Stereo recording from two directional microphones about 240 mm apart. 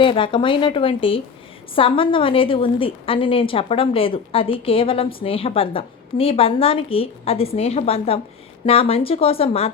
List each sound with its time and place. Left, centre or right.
0.0 s a woman's voice: left